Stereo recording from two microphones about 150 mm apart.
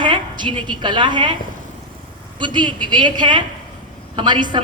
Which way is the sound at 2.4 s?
30° right (ahead or behind).